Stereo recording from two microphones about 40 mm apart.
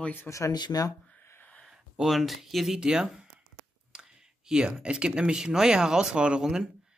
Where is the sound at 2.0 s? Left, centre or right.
Centre.